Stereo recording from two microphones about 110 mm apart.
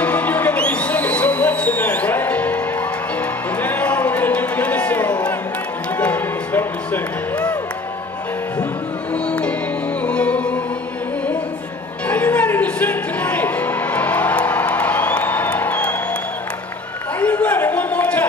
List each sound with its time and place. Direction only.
0.0 s music: 15° left (ahead or behind)
3.6 s a sound: 15° left (ahead or behind)
5.9 s music: 15° left (ahead or behind)
9.3 s music: 10° left (ahead or behind)
12.1 s music: 15° left (ahead or behind)
17.2 s a sound: 15° left (ahead or behind)